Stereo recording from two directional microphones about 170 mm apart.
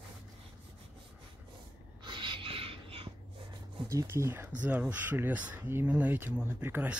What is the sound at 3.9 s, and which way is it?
Speech, 15° right (ahead or behind).